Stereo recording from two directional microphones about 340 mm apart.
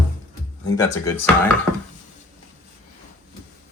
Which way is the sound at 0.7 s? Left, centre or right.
Centre.